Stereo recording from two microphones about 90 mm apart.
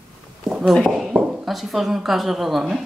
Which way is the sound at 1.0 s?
10° right (ahead or behind).